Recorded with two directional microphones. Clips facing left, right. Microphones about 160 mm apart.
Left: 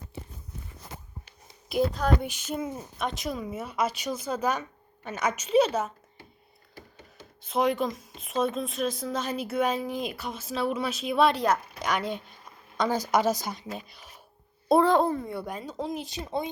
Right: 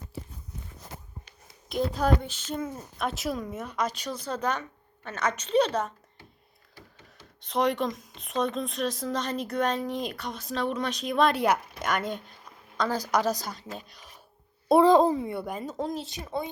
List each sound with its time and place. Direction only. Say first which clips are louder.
1.7 s a woman's voice: left 2 dB; 5° right (ahead or behind)
2.2 s speech: left 1 dB; 10° left (ahead or behind)
7.4 s a woman's voice: even; 5° left (ahead or behind)
14.8 s a woman's voice: right 4 dB; 15° right (ahead or behind)
15.1 s a woman's voice: right 2 dB; 5° right (ahead or behind)
16.2 s speech: left 2 dB; 20° left (ahead or behind)